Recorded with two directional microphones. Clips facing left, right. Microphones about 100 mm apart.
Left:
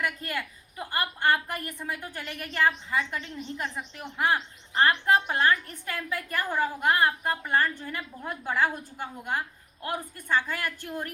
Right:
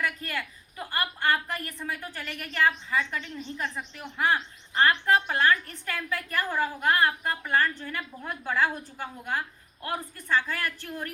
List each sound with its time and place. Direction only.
0.0 s a woman's voice: 15° left (ahead or behind)